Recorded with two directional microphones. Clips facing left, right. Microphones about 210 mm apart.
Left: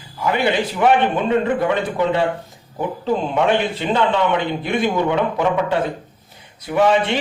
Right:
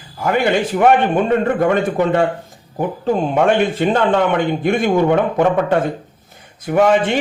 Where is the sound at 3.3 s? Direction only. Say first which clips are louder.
Right 4 dB; 50° right (ahead or behind).